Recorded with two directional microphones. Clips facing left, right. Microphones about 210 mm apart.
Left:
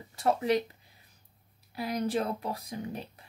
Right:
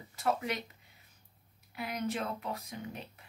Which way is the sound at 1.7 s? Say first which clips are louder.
Left 5 dB; 35° left (ahead or behind).